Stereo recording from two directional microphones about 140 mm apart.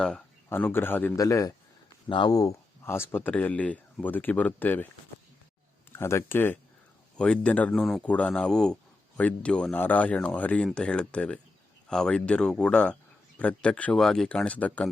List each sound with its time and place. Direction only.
0.0 s speech: 10° left (ahead or behind); by 1.5 s 25° left (ahead or behind)
2.0 s speech: 35° left (ahead or behind); by 4.9 s 15° left (ahead or behind)
5.9 s speech: 20° left (ahead or behind)